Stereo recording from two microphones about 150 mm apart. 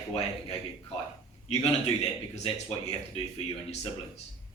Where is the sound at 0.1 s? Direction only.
45° left (ahead or behind).